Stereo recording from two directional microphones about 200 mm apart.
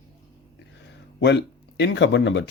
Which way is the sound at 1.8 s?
60° left (ahead or behind).